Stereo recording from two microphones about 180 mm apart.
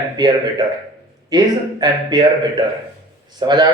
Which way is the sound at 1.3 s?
25° right (ahead or behind).